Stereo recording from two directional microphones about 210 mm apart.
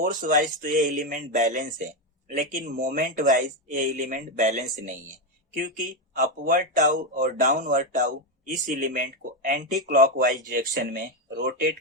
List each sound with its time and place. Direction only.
0.0 s speech: 40° right (ahead or behind)